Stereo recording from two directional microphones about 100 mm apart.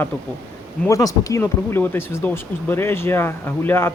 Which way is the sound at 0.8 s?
35° left (ahead or behind).